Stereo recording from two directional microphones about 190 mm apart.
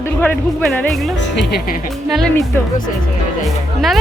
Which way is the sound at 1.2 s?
65° left (ahead or behind).